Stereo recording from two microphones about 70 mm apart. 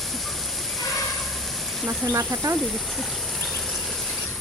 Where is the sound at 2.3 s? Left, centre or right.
Right.